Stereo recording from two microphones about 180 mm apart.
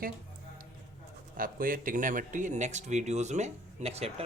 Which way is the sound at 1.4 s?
50° right (ahead or behind).